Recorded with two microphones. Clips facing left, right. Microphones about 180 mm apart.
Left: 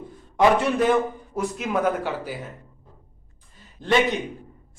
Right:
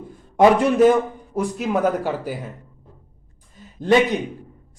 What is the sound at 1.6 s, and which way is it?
Speech, 40° right (ahead or behind).